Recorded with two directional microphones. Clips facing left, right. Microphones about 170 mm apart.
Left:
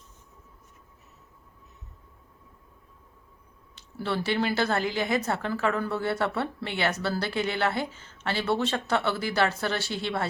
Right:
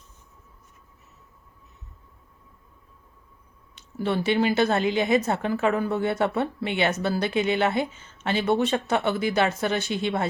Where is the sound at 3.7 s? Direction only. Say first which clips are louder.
Right 4 dB; 20° right (ahead or behind).